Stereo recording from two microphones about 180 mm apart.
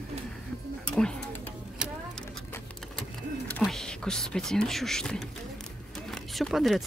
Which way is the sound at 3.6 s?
Centre (ahead or behind).